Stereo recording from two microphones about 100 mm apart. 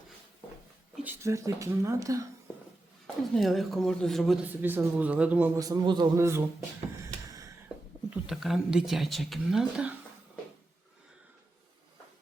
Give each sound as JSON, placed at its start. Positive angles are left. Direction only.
{"t": 1.2, "sound": "speech", "side_deg": -30}
{"t": 3.3, "sound": "speech", "side_deg": 0}
{"t": 4.4, "sound": "speech", "side_deg": -20}
{"t": 5.5, "sound": "a man's voice", "side_deg": -40}
{"t": 6.1, "sound": "speech", "side_deg": -30}
{"t": 7.0, "sound": "a sound", "side_deg": -35}
{"t": 8.1, "sound": "speech", "side_deg": -5}